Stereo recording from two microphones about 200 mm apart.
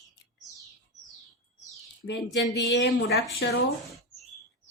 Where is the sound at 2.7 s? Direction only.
55° left (ahead or behind).